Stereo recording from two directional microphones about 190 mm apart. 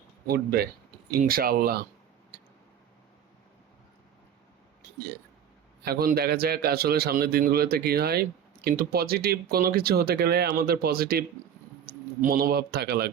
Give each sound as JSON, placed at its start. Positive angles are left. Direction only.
{"t": 0.3, "sound": "a man's voice", "side_deg": -55}
{"t": 5.8, "sound": "a man's voice", "side_deg": -55}